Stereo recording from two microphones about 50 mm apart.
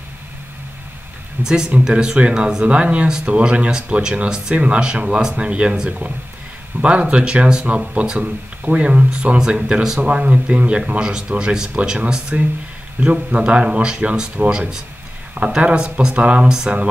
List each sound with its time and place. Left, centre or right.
1.4 s speech: centre
15.3 s speech: right